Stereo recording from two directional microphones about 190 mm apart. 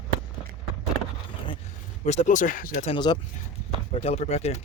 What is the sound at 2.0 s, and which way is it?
Speech, 40° left (ahead or behind).